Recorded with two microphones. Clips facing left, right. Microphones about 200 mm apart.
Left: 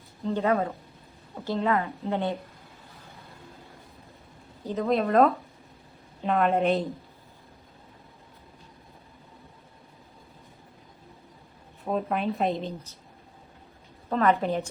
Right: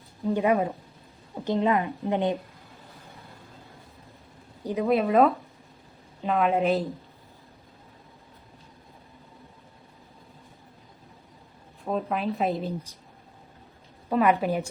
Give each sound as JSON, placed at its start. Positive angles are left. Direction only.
{"t": 0.3, "sound": "a woman's voice", "side_deg": -15}
{"t": 4.6, "sound": "a woman's voice", "side_deg": -10}
{"t": 11.9, "sound": "speech", "side_deg": 0}
{"t": 14.1, "sound": "a woman's voice", "side_deg": -10}